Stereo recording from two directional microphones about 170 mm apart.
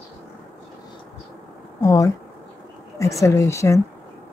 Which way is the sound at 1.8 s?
20° left (ahead or behind).